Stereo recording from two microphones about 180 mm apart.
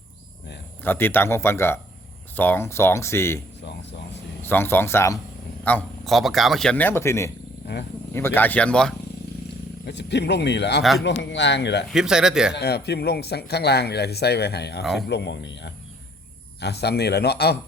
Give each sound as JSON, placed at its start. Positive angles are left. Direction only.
{"t": 0.8, "sound": "a man's voice", "side_deg": 10}
{"t": 4.4, "sound": "a man's voice", "side_deg": 10}
{"t": 9.8, "sound": "speech", "side_deg": 70}
{"t": 11.9, "sound": "speech", "side_deg": -5}
{"t": 12.5, "sound": "speech", "side_deg": 65}
{"t": 16.6, "sound": "speech", "side_deg": 65}